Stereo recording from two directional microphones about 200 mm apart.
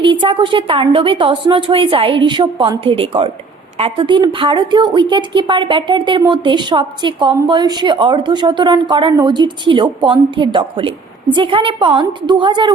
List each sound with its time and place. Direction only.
0.0 s a woman's voice: 25° right (ahead or behind)